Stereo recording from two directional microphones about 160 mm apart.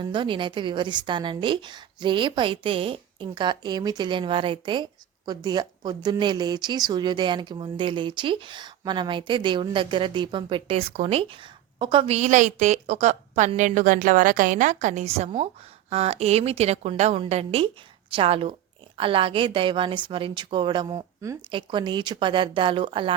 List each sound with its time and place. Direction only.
0.0 s a woman's voice: 30° right (ahead or behind)